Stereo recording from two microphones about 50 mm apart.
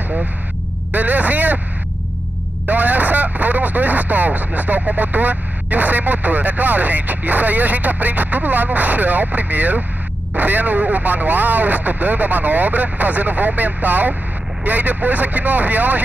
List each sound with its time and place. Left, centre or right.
0.9 s speech: right
2.6 s speech: right